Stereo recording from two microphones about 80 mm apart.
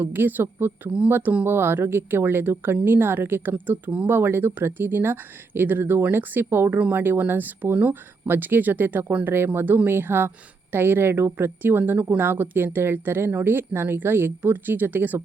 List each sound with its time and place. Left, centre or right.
0.0 s speech: right
6.7 s speech: centre
7.0 s speech: right